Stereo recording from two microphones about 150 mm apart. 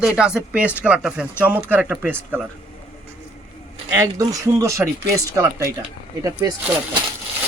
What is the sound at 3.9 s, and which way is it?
Speech, 20° right (ahead or behind).